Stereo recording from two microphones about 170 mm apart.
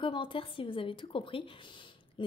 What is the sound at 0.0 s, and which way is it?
A woman's voice, 30° left (ahead or behind).